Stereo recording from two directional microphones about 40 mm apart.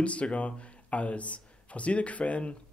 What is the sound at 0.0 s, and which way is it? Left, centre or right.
Speech, left.